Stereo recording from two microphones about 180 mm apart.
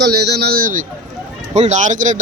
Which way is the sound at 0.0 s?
65° right (ahead or behind).